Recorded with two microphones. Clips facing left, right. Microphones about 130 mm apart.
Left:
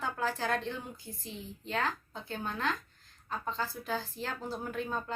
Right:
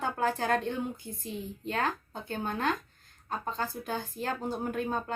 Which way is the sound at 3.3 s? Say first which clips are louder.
Right 2 dB; 50° right (ahead or behind).